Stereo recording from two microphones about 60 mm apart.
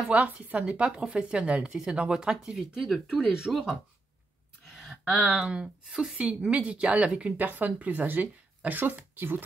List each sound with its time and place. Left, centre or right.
0.0 s a woman's voice: right; by 3.6 s centre
4.6 s speech: centre; by 9.4 s right